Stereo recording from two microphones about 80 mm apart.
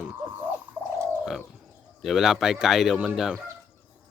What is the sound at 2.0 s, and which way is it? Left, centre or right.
Speech, centre.